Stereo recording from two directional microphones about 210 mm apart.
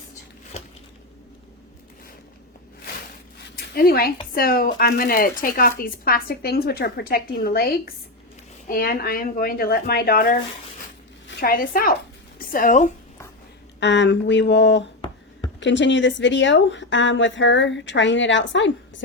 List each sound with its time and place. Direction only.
3.6 s a woman's voice: 45° left (ahead or behind)
13.7 s speech: 55° left (ahead or behind)